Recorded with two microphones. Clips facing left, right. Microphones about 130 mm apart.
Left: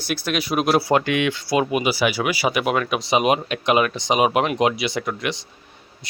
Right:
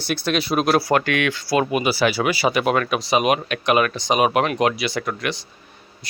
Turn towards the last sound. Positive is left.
turn(degrees=20)  # may be behind; listen again after turning